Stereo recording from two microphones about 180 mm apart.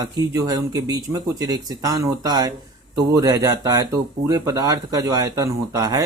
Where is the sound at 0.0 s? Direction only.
20° right (ahead or behind).